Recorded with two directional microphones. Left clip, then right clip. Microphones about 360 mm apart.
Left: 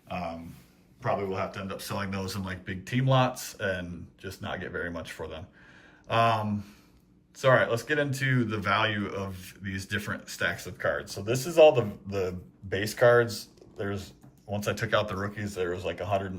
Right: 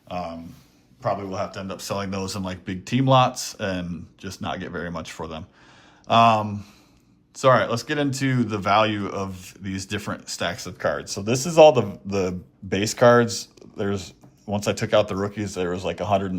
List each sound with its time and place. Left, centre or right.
0.1 s a sound: centre
1.0 s speech: centre
14.6 s speech: centre